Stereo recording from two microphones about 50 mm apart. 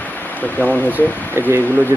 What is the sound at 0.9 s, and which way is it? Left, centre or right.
Speech, right.